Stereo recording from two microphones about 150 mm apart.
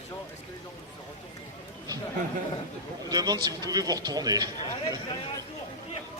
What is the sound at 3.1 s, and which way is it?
A man's voice, 25° right (ahead or behind).